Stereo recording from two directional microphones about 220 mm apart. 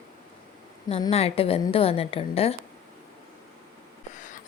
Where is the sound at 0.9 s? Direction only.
25° left (ahead or behind).